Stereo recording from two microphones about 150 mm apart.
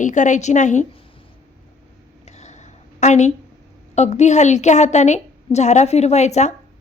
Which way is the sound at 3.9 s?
50° left (ahead or behind).